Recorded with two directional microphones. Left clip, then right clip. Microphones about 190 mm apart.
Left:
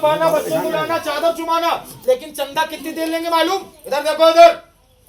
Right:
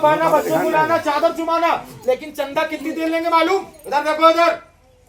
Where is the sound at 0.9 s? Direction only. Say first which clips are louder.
Right 1 dB; 35° right (ahead or behind).